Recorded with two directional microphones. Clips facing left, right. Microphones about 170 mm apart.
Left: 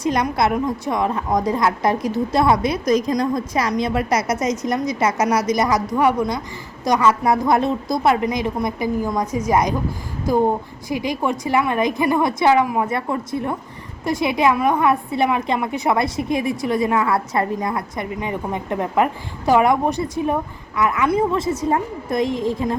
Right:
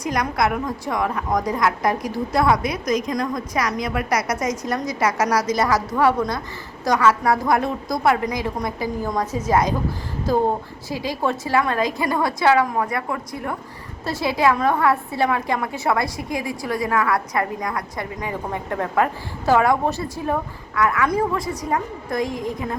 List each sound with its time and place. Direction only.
0.0 s a woman's voice: 25° left (ahead or behind)